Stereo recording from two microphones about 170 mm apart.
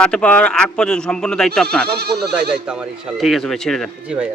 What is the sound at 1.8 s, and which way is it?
Speech, 70° right (ahead or behind).